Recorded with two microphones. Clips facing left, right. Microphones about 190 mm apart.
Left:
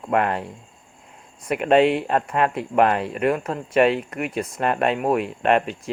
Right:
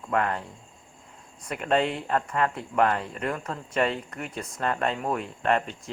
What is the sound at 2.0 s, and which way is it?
Speech, 20° left (ahead or behind).